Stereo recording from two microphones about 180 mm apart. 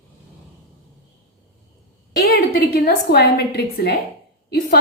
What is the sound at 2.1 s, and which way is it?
A woman's voice, 60° left (ahead or behind).